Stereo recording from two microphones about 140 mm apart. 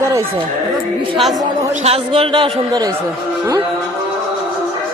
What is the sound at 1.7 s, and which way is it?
A man's voice, 45° right (ahead or behind).